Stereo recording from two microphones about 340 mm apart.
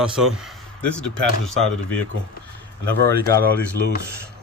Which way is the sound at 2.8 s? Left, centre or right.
Right.